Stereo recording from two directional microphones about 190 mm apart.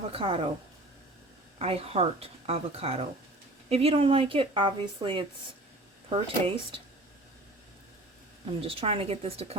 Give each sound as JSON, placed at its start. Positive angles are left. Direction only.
{"t": 0.1, "sound": "speech", "side_deg": -30}
{"t": 1.5, "sound": "speech", "side_deg": -30}
{"t": 8.6, "sound": "speech", "side_deg": -30}